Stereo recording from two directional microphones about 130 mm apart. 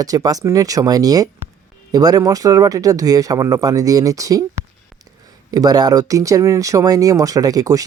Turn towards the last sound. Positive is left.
turn(degrees=-30)  # may be behind; listen again after turning